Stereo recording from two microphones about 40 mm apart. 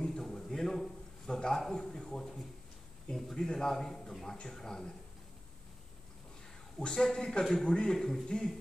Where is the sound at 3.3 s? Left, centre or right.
Centre.